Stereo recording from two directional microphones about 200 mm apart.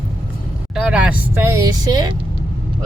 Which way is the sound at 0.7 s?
5° right (ahead or behind).